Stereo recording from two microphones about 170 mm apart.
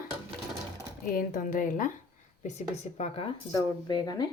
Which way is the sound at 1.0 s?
55° left (ahead or behind).